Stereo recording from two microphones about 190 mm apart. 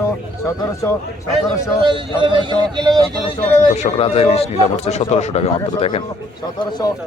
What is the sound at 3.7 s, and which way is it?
A man's voice, 35° left (ahead or behind).